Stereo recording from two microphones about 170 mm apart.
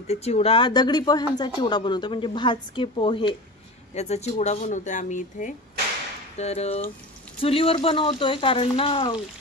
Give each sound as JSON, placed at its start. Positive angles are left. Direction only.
{"t": 0.0, "sound": "speech", "side_deg": 40}
{"t": 3.9, "sound": "speech", "side_deg": 40}